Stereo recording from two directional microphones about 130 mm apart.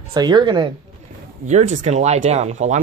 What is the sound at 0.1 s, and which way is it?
Speech, 35° right (ahead or behind).